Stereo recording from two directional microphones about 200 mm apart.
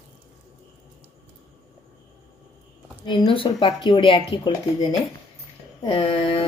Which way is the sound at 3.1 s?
25° left (ahead or behind).